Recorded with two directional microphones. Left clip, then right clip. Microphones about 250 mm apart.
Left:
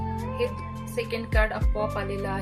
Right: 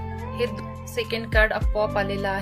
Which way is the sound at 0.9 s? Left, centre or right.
Right.